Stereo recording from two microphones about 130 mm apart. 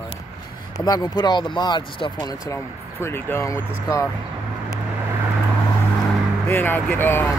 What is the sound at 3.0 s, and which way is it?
Speech, 20° left (ahead or behind).